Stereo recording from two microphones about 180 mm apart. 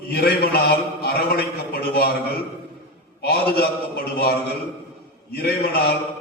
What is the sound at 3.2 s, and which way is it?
A man's voice, 60° left (ahead or behind).